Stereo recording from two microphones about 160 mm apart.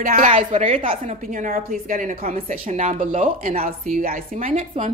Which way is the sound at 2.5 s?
55° right (ahead or behind).